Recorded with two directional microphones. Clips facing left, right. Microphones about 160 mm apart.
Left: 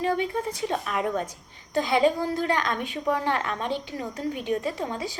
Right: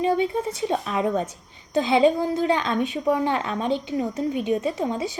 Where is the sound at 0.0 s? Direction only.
20° right (ahead or behind).